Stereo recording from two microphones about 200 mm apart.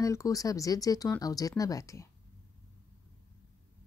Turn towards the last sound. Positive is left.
turn(degrees=15)  # may be behind; listen again after turning